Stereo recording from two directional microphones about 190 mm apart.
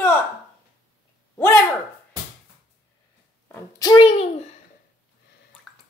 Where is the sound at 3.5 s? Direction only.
20° left (ahead or behind).